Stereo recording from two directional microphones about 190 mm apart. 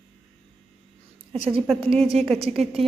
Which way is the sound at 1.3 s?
30° right (ahead or behind).